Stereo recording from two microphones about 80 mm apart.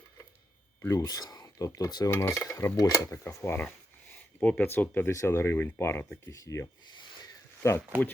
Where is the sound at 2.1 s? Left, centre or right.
Left.